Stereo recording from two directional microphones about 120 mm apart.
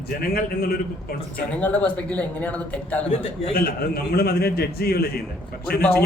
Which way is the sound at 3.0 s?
70° left (ahead or behind).